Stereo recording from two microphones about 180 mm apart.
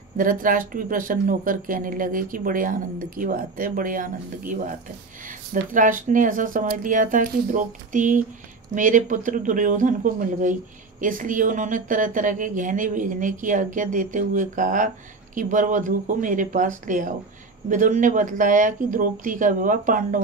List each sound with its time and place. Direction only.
0.2 s speech: 50° right (ahead or behind)